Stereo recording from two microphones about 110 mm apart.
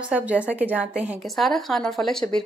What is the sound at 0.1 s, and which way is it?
A woman's voice, 15° right (ahead or behind).